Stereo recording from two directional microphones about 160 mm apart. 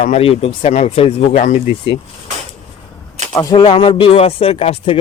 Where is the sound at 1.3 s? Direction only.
55° left (ahead or behind).